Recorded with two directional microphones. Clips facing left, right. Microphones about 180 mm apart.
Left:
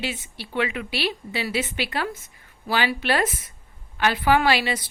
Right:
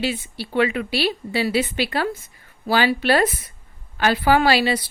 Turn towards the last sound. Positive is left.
turn(degrees=-35)  # may be behind; listen again after turning